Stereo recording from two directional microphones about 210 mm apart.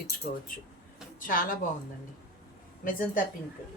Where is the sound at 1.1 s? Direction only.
40° left (ahead or behind).